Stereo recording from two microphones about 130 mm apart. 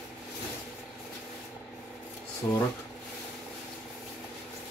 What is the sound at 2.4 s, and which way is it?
Speech, 30° left (ahead or behind).